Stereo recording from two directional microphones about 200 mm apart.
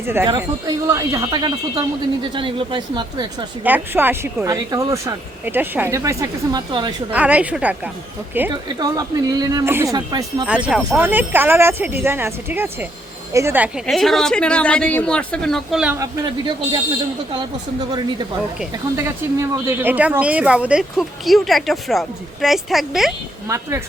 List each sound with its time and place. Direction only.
0.9 s speech: 15° right (ahead or behind)
3.6 s speech: 10° right (ahead or behind)
7.1 s speech: 5° right (ahead or behind)
10.4 s speech: 5° right (ahead or behind)
17.3 s speech: 20° right (ahead or behind)
19.4 s speech: 10° right (ahead or behind)
23.5 s speech: 15° right (ahead or behind)